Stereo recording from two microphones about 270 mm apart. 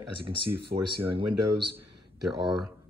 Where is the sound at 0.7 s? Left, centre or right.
Right.